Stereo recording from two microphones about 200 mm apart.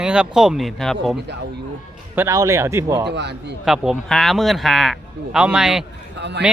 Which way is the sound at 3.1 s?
60° right (ahead or behind).